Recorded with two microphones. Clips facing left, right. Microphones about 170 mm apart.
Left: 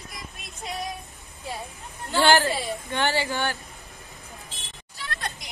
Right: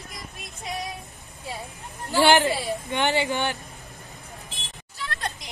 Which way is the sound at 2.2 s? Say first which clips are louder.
Right 1 dB; 20° right (ahead or behind).